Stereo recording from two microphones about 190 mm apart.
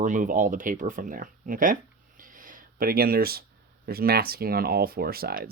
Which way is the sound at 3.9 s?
55° right (ahead or behind).